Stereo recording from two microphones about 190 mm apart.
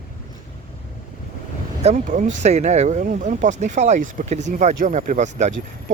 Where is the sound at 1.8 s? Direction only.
40° right (ahead or behind).